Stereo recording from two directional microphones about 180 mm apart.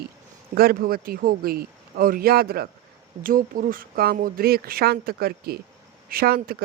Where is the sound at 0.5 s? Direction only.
60° right (ahead or behind).